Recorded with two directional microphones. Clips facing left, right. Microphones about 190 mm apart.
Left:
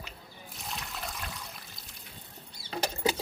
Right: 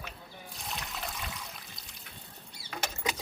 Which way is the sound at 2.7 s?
35° left (ahead or behind).